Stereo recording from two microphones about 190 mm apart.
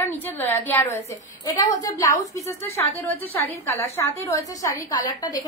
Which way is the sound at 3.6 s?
15° left (ahead or behind).